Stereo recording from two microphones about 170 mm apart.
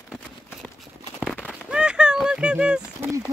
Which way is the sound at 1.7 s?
5° right (ahead or behind).